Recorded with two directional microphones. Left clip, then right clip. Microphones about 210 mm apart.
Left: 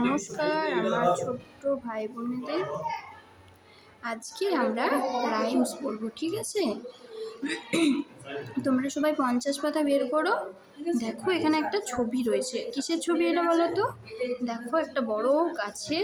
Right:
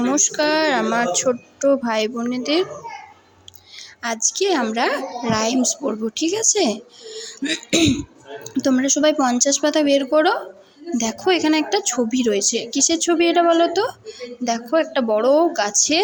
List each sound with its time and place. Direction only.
0.0 s a woman's voice: 25° right (ahead or behind)
4.0 s a woman's voice: 35° right (ahead or behind)
7.4 s throat clearing: 25° right (ahead or behind)
8.6 s a woman's voice: 30° right (ahead or behind)